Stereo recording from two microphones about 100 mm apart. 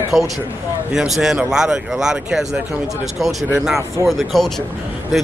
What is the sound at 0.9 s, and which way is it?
Speech, 5° right (ahead or behind).